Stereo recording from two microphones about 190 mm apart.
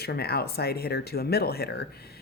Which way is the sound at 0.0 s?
55° left (ahead or behind).